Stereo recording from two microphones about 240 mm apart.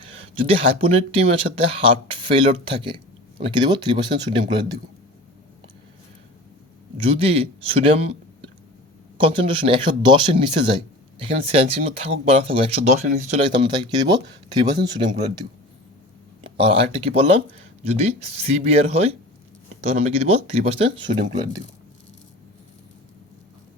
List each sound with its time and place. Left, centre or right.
0.4 s speech: right
6.9 s speech: right
9.1 s speech: right
13.5 s speech: centre
20.2 s speech: right